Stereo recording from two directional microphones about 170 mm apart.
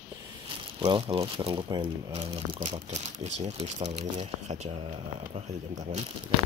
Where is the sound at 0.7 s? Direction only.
30° right (ahead or behind).